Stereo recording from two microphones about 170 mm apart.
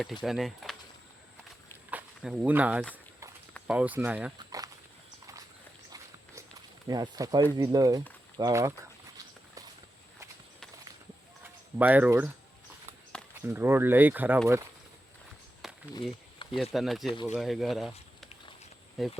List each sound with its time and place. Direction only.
0.0 s speech: centre (ahead or behind)
1.9 s speech: 5° right (ahead or behind)
4.4 s walk: 20° right (ahead or behind)
6.8 s speech: 20° right (ahead or behind)
11.8 s speech: 10° right (ahead or behind)
13.4 s speech: 15° right (ahead or behind)
15.6 s a sound: centre (ahead or behind)
16.6 s speech: centre (ahead or behind)